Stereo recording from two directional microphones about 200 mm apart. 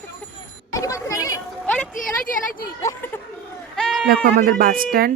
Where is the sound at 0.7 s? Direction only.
15° left (ahead or behind).